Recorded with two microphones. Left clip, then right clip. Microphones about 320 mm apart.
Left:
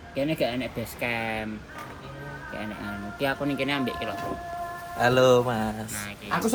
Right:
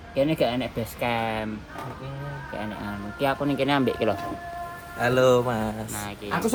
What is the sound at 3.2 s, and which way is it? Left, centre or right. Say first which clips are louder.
Speech: right 3 dB; centre.